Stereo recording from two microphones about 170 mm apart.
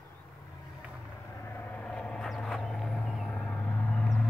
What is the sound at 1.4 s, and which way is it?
Vehicle, 15° left (ahead or behind).